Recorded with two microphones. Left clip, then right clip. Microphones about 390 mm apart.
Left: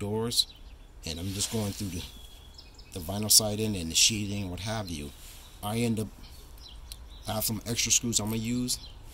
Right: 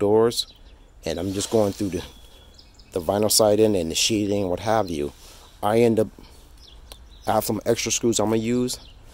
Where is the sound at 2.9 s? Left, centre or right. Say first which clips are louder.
Right 6 dB; centre.